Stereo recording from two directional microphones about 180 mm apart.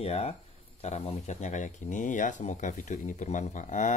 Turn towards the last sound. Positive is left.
turn(degrees=45)  # may be behind; listen again after turning